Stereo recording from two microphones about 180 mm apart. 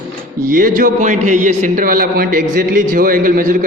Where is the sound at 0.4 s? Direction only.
50° right (ahead or behind).